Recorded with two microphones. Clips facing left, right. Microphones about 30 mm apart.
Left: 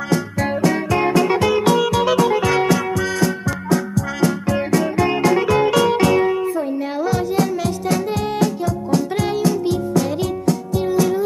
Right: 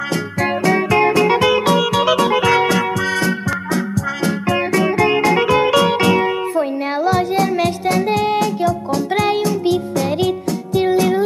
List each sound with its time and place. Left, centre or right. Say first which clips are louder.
0.1 s music: left 1 dB; right
4.5 s music: right 2 dB; right
7.0 s music: right 4 dB; right
8.1 s music: right 4 dB; right